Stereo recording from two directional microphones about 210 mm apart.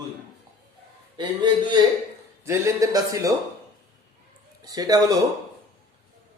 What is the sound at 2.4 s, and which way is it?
Speech, 15° right (ahead or behind).